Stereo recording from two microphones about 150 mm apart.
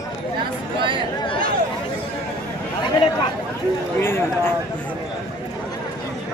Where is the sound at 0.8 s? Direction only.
35° right (ahead or behind).